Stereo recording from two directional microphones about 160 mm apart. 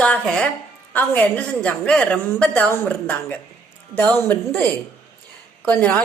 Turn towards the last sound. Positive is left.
turn(degrees=10)  # may be behind; listen again after turning